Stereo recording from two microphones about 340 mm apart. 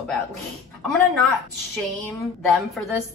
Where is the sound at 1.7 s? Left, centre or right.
Centre.